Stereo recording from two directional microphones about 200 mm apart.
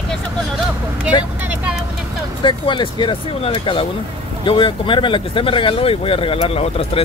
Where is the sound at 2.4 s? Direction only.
25° left (ahead or behind).